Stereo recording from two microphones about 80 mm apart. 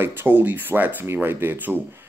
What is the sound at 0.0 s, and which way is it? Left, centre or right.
Speech, right.